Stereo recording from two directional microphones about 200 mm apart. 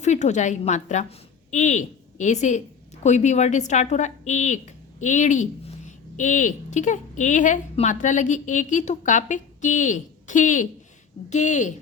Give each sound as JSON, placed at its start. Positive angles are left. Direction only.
{"t": 0.0, "sound": "a woman's voice", "side_deg": 35}